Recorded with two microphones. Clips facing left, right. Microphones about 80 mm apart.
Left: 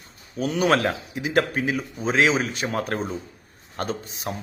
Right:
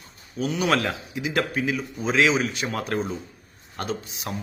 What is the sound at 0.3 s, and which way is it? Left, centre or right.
A man's voice, left.